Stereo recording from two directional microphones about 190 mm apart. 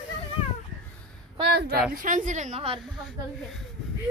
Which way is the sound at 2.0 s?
45° right (ahead or behind).